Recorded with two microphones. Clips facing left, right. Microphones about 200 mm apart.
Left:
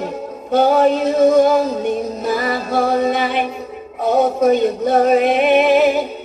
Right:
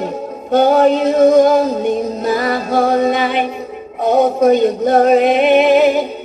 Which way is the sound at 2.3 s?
40° right (ahead or behind).